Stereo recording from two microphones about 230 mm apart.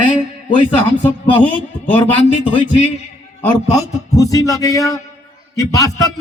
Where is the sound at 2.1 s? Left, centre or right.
Left.